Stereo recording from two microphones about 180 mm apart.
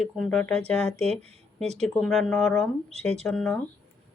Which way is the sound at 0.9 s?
35° right (ahead or behind).